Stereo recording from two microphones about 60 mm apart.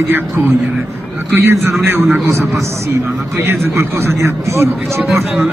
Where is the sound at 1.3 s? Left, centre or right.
Right.